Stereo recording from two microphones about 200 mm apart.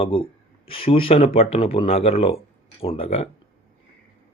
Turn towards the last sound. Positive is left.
turn(degrees=30)  # may be behind; listen again after turning